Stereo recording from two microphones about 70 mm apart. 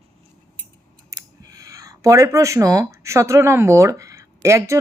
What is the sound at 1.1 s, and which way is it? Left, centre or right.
Speech, right.